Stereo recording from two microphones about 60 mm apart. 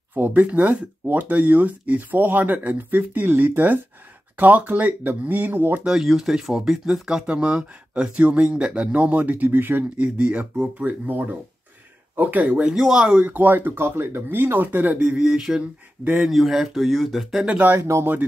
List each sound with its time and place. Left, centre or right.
0.1 s speech: right
5.9 s speech: centre; by 9.8 s right
9.9 s speech: centre
12.7 s speech: centre
13.3 s speech: right
16.2 s speech: centre
17.7 s speech: right